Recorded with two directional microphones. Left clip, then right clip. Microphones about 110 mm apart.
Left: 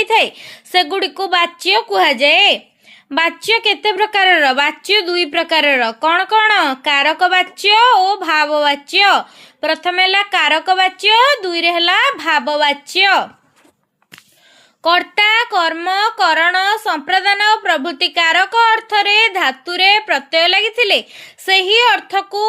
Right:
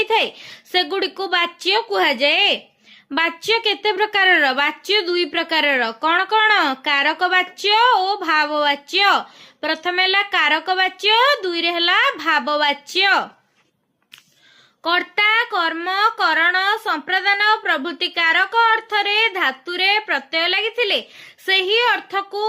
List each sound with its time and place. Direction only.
0.0 s a woman's voice: 45° left (ahead or behind)
14.8 s a woman's voice: 60° left (ahead or behind)